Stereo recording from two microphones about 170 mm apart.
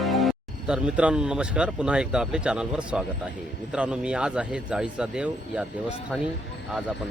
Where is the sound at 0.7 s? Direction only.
5° right (ahead or behind).